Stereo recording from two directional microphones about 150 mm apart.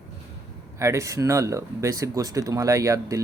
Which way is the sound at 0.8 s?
20° right (ahead or behind).